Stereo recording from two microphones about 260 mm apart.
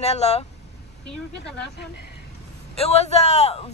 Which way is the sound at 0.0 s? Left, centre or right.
Left.